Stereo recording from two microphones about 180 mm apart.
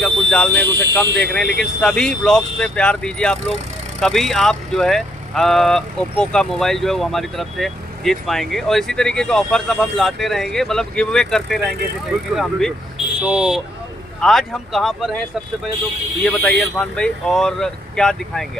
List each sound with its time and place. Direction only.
0.5 s speech: 70° right (ahead or behind)
1.1 s speech: 5° left (ahead or behind)